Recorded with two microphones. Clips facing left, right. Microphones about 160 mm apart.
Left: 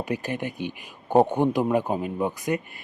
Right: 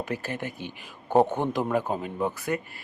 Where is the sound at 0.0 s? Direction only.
15° left (ahead or behind).